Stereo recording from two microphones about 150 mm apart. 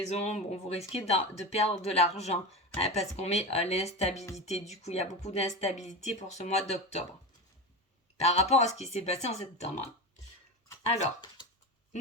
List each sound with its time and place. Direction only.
0.1 s speech: 45° left (ahead or behind)
8.2 s speech: 45° left (ahead or behind)